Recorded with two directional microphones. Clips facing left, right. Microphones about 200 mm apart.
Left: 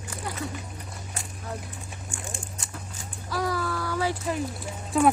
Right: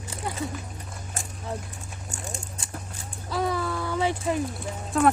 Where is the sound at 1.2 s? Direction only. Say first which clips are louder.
Right 3 dB; 45° right (ahead or behind).